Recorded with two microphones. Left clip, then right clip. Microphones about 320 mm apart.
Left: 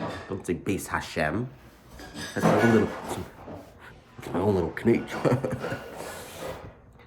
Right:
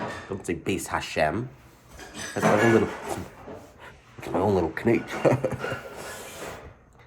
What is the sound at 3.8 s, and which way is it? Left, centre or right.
Speech, centre.